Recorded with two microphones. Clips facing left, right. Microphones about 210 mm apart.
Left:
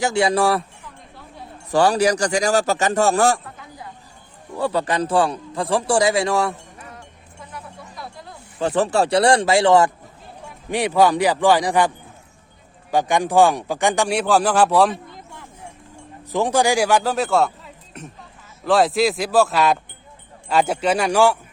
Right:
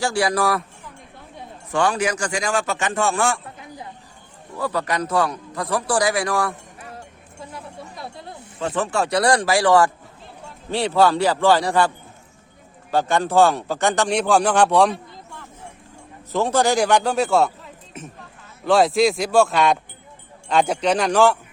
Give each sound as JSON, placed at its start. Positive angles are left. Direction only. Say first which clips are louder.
{"t": 0.0, "sound": "a man's voice", "louder": "left 3 dB", "side_deg": 25}
{"t": 1.7, "sound": "a man's voice", "louder": "left 4 dB", "side_deg": 35}
{"t": 4.5, "sound": "a man's voice", "louder": "left 3 dB", "side_deg": 30}
{"t": 7.4, "sound": "a sound", "louder": "right 2 dB", "side_deg": -25}
{"t": 8.5, "sound": "a man's voice", "louder": "left 4 dB", "side_deg": 35}
{"t": 12.9, "sound": "speech", "louder": "left 1 dB", "side_deg": 15}
{"t": 16.3, "sound": "speech", "louder": "left 1 dB", "side_deg": 15}